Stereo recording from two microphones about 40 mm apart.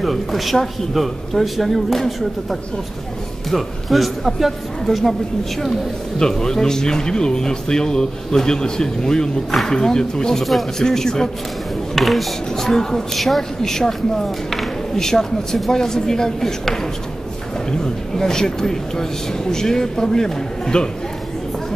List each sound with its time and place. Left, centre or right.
0.0 s speech: centre
11.9 s speech: centre